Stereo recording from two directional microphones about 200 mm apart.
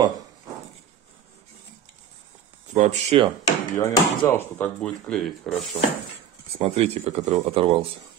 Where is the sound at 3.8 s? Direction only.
15° left (ahead or behind).